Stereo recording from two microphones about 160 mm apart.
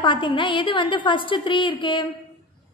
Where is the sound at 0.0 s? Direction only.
30° left (ahead or behind).